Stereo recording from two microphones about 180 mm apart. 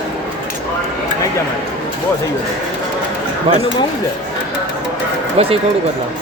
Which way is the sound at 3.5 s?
30° right (ahead or behind).